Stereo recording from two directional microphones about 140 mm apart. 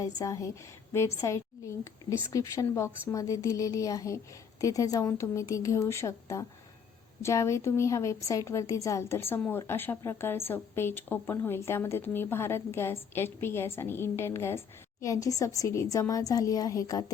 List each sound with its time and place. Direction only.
0.0 s a woman's voice: 20° left (ahead or behind)